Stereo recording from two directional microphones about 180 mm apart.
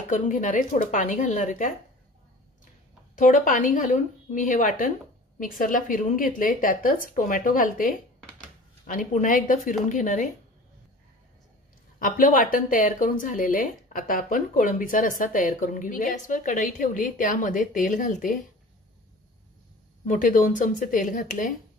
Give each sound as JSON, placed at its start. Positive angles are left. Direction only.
{"t": 0.1, "sound": "speech", "side_deg": 45}
{"t": 3.2, "sound": "speech", "side_deg": 45}
{"t": 12.0, "sound": "speech", "side_deg": 50}
{"t": 20.1, "sound": "speech", "side_deg": 45}